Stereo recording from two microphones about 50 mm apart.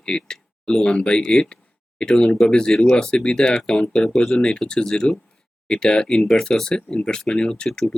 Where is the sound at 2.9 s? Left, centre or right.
Centre.